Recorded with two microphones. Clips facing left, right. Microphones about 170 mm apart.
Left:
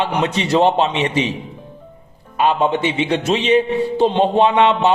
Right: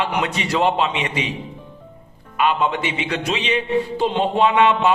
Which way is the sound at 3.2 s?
45° left (ahead or behind).